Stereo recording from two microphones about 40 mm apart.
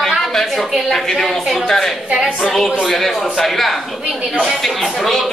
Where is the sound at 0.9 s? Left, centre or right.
Centre.